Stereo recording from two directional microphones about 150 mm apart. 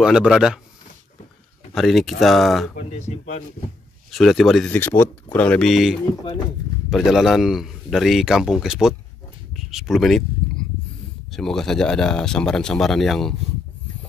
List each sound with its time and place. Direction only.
0.0 s speech: 5° right (ahead or behind)
1.7 s speech: centre (ahead or behind)
3.0 s speech: 50° left (ahead or behind)
4.1 s speech: centre (ahead or behind)
4.6 s speech: 15° left (ahead or behind)